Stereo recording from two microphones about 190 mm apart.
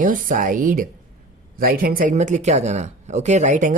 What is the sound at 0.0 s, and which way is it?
Speech, 45° right (ahead or behind).